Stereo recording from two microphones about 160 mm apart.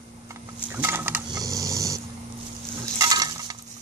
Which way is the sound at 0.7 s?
15° right (ahead or behind).